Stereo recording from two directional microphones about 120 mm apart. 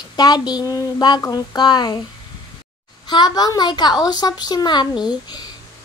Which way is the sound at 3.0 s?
35° left (ahead or behind).